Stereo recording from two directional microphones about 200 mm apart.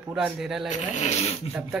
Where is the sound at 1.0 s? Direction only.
35° left (ahead or behind).